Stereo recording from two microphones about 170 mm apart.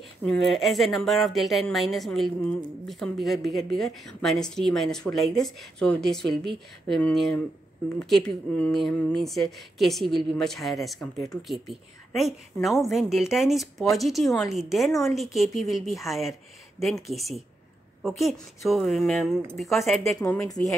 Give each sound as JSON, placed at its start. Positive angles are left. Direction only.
{"t": 0.2, "sound": "speech", "side_deg": 0}
{"t": 20.2, "sound": "speech", "side_deg": 20}